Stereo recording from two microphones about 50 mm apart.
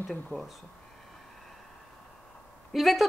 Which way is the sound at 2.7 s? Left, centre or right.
Centre.